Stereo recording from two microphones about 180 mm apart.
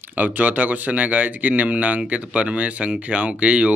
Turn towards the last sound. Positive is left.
turn(degrees=-5)  # may be behind; listen again after turning